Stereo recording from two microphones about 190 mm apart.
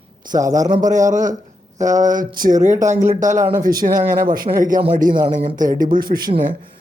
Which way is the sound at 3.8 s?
45° right (ahead or behind).